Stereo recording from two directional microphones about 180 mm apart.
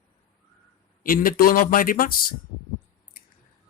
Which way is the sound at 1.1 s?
55° left (ahead or behind).